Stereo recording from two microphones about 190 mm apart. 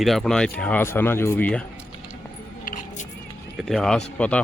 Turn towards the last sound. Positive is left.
turn(degrees=5)  # may be behind; listen again after turning